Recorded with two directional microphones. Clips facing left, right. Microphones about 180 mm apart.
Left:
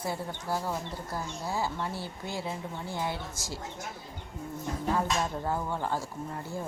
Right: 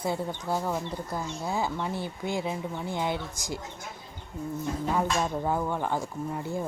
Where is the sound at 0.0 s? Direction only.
20° right (ahead or behind).